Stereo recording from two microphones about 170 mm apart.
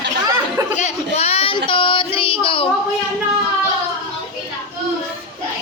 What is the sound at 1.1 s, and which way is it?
Child singing, 35° left (ahead or behind).